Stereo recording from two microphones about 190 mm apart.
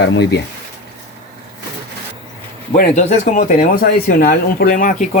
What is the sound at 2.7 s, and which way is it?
Speech, 40° left (ahead or behind).